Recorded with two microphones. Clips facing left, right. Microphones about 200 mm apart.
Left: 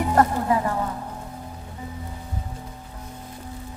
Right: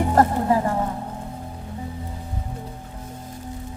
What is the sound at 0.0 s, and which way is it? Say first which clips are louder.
Music: right 2 dB; 30° right (ahead or behind).